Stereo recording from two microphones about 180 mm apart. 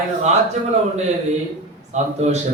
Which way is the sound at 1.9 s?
40° right (ahead or behind).